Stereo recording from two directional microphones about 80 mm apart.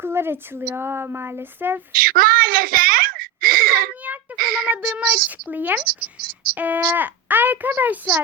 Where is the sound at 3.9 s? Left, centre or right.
Centre.